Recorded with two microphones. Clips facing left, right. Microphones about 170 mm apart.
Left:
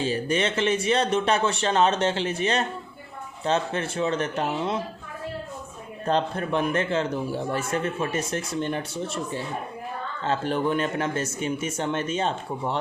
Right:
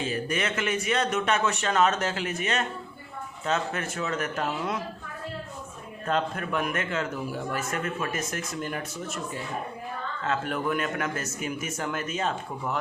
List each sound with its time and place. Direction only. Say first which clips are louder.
0.0 s a man's voice: left 4 dB; 30° left (ahead or behind)
6.1 s a man's voice: left 3 dB; 30° left (ahead or behind)